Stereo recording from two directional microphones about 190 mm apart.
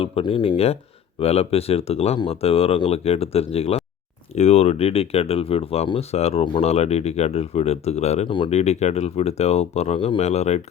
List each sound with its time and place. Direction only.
0.0 s speech: 25° left (ahead or behind)